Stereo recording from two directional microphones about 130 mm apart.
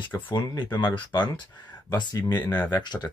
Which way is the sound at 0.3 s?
35° left (ahead or behind).